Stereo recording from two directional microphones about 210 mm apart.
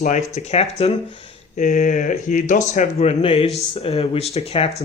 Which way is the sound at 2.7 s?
30° left (ahead or behind).